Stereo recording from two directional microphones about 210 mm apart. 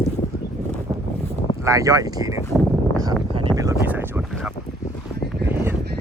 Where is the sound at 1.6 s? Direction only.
15° right (ahead or behind).